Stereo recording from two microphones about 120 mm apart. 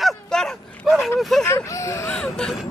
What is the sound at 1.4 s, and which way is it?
Speech, 25° left (ahead or behind).